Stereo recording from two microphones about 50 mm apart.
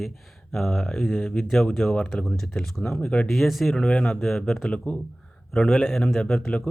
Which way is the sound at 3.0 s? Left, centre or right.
Left.